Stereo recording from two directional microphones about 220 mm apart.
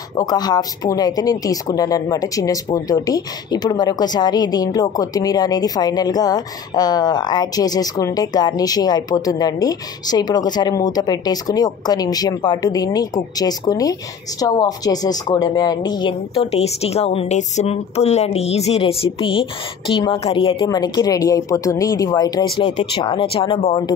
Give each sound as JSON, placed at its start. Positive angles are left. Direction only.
{"t": 0.1, "sound": "speech", "side_deg": 20}